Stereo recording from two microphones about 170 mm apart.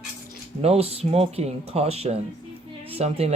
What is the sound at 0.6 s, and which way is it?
Speech, 35° right (ahead or behind).